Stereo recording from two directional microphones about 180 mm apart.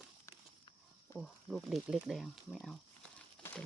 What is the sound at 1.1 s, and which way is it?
Speech, centre (ahead or behind).